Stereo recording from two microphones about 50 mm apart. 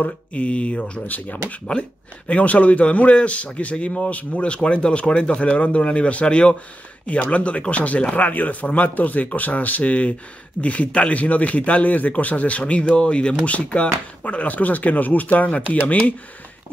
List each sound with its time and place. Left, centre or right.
0.0 s speech: left
1.0 s speech: left
1.5 s speech: left